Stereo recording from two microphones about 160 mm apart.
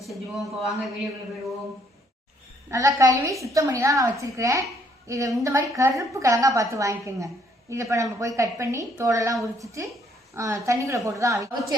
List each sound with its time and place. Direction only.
0.1 s speech: centre (ahead or behind)
2.6 s a woman's voice: 20° right (ahead or behind)